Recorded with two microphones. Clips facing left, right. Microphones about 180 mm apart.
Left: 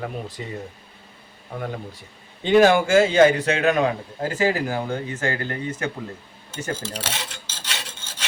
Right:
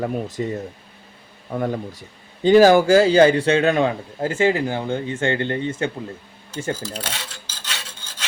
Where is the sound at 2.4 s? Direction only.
35° right (ahead or behind).